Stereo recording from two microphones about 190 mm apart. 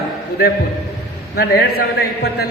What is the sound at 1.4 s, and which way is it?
A man's voice, 60° left (ahead or behind).